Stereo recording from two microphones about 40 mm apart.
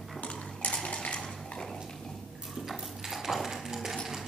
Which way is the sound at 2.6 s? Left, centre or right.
Centre.